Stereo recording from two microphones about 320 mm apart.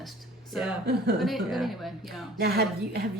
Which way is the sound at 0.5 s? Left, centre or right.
Centre.